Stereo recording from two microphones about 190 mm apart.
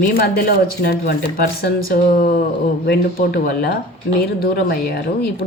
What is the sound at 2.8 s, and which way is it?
Speech, 55° left (ahead or behind).